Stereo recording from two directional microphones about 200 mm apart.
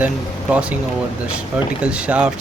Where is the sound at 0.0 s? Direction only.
5° right (ahead or behind).